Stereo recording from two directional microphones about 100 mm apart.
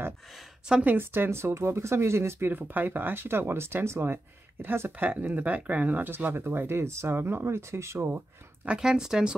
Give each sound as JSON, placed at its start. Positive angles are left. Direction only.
{"t": 0.7, "sound": "speech", "side_deg": -10}
{"t": 0.9, "sound": "speech", "side_deg": -20}
{"t": 8.6, "sound": "speech", "side_deg": -5}